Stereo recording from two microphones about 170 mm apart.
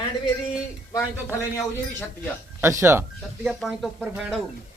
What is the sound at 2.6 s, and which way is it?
Speech, 15° right (ahead or behind).